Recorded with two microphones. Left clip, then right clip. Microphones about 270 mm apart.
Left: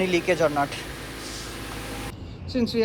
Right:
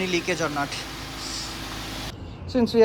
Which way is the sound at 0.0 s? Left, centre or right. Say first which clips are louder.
Left 3 dB; centre.